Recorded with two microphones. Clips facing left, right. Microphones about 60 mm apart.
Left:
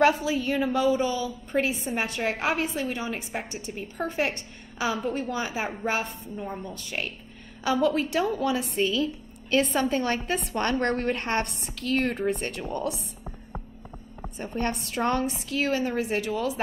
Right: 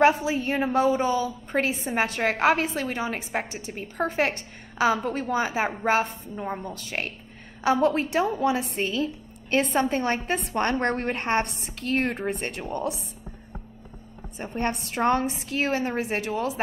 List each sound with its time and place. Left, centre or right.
0.0 s a woman's voice: right
14.4 s a woman's voice: right